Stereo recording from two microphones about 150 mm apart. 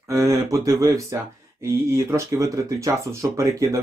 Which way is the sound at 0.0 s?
20° right (ahead or behind).